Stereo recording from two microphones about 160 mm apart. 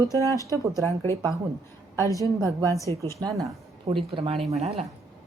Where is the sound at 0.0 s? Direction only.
20° right (ahead or behind).